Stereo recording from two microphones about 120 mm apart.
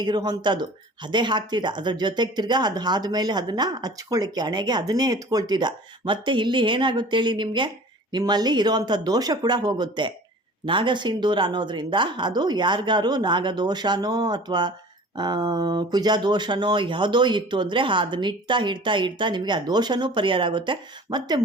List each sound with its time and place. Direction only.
0.0 s speech: 35° right (ahead or behind)